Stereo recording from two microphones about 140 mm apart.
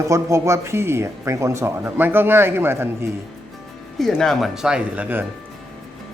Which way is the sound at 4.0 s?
Centre (ahead or behind).